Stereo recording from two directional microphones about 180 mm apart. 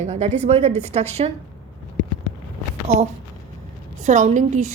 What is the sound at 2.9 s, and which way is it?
A woman's voice, 35° right (ahead or behind).